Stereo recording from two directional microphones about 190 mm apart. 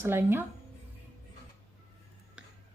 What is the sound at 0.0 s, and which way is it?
Speech, 10° right (ahead or behind).